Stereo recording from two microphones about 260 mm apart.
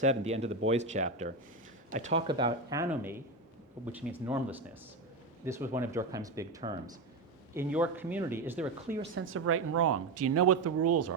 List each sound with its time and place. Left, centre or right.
0.0 s speech: right; by 9.0 s centre
9.1 s speech: right